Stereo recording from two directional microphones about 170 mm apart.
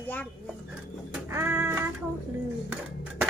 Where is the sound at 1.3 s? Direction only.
15° right (ahead or behind).